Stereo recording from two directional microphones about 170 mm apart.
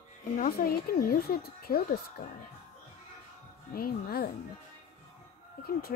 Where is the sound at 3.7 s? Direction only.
60° left (ahead or behind).